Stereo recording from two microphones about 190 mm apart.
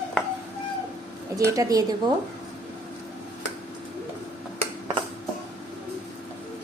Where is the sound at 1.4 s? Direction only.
15° right (ahead or behind).